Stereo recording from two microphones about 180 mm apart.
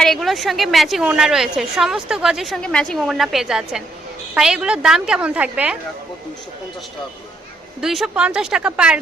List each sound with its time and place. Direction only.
0.0 s a woman's voice: centre (ahead or behind)
7.8 s a woman's voice: centre (ahead or behind)